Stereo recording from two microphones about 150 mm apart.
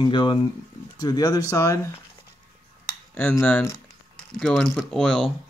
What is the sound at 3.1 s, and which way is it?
Speech, 15° left (ahead or behind).